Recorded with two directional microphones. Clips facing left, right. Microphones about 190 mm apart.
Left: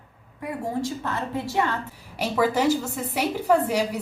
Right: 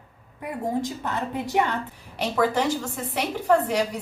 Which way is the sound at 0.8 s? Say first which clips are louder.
Even; 15° right (ahead or behind).